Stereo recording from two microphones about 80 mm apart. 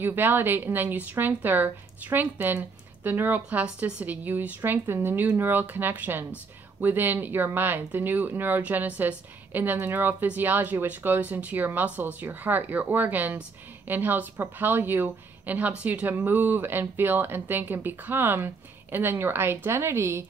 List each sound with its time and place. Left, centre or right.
0.0 s speech: right